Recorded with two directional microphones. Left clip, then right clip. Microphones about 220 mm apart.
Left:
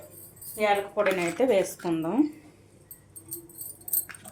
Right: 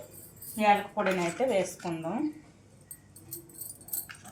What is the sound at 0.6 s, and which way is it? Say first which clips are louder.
Speech: left 1 dB; 45° left (ahead or behind).